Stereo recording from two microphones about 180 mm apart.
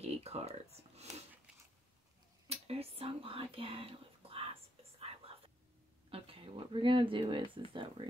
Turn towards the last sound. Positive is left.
turn(degrees=-30)  # may be behind; listen again after turning